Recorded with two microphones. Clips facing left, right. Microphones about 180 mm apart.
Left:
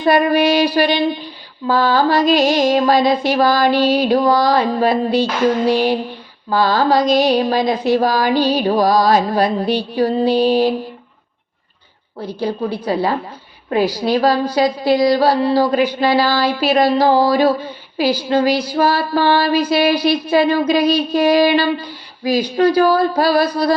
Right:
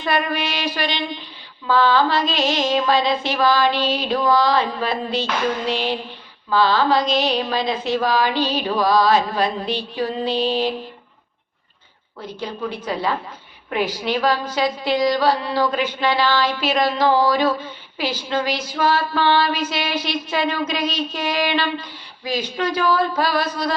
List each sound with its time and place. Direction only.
0.0 s a woman's voice: 35° left (ahead or behind)
5.6 s mantra: 10° left (ahead or behind)
6.5 s a woman's voice: 40° left (ahead or behind)
10.2 s mantra: 10° left (ahead or behind)
12.2 s a woman's voice: 35° left (ahead or behind)
21.1 s female singing: 35° left (ahead or behind)
22.5 s a woman's voice: 35° left (ahead or behind)